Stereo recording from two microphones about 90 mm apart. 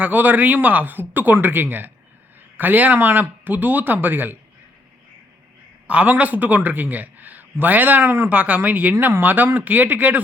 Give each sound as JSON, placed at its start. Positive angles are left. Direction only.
{"t": 0.0, "sound": "a man's voice", "side_deg": -20}
{"t": 5.9, "sound": "a man's voice", "side_deg": -15}